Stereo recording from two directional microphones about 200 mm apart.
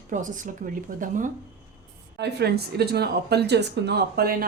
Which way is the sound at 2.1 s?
55° right (ahead or behind).